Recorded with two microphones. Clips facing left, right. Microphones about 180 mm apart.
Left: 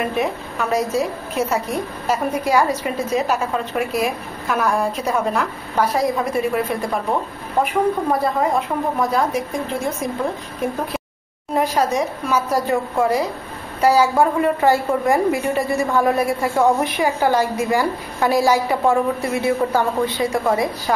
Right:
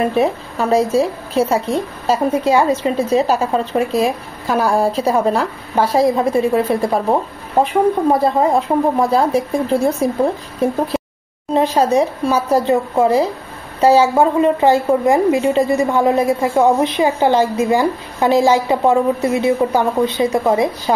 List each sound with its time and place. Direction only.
0.0 s a woman's voice: 30° right (ahead or behind)